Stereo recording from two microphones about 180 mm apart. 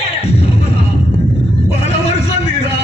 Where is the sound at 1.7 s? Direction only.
35° left (ahead or behind).